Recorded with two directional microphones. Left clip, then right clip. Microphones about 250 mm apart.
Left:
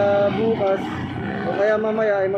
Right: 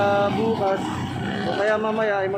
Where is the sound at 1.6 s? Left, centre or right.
Centre.